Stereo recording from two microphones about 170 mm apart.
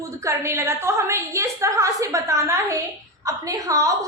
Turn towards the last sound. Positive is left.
turn(degrees=-20)  # may be behind; listen again after turning